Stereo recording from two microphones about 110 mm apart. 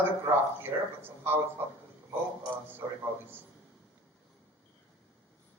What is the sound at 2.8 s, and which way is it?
Speech, 30° right (ahead or behind).